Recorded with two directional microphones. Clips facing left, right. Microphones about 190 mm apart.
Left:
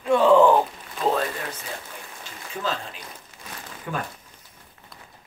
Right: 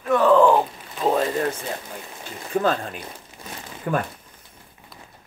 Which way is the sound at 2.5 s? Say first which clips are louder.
Right 8 dB; 55° right (ahead or behind).